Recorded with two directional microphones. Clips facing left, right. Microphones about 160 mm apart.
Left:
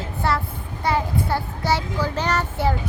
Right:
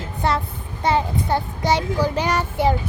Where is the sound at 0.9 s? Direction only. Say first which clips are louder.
Right 2 dB; 20° right (ahead or behind).